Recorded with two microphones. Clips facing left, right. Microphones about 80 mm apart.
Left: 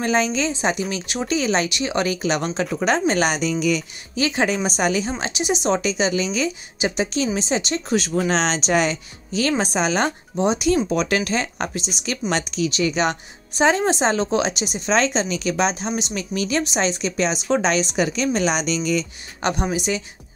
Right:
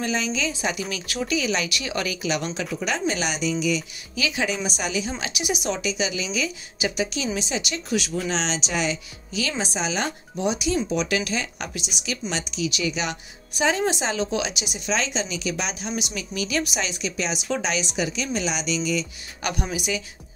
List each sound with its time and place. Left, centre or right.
0.0 s a woman's voice: left
0.5 s a woman's voice: left
1.7 s speech: left
2.0 s speech: left
4.1 s a woman's voice: left
5.2 s a woman's voice: left
5.8 s a woman's voice: left
10.4 s a woman's voice: left
10.9 s speech: left
12.0 s a woman's voice: left
19.4 s a woman's voice: left